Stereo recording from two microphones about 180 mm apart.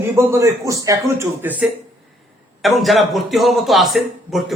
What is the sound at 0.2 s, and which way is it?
A man's voice, 15° right (ahead or behind).